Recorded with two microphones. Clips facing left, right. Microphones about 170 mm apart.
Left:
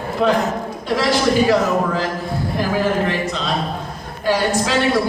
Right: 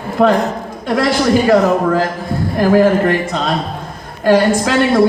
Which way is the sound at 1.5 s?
50° right (ahead or behind).